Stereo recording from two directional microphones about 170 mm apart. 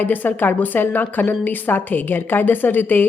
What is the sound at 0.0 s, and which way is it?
A woman's voice, 10° left (ahead or behind).